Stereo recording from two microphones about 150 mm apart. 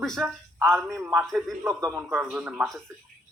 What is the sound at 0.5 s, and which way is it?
Speech, 20° right (ahead or behind).